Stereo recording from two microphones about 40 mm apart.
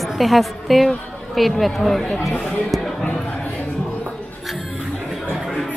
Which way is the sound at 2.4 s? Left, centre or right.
Centre.